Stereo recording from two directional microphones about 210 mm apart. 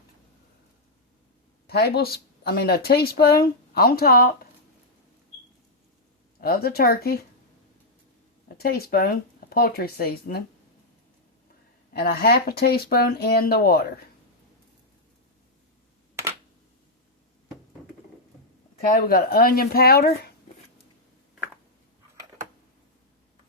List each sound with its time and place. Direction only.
1.6 s speech: 50° left (ahead or behind)
6.4 s speech: 45° left (ahead or behind)
8.4 s speech: 45° left (ahead or behind)
11.9 s speech: 50° left (ahead or behind)
18.9 s speech: 45° left (ahead or behind)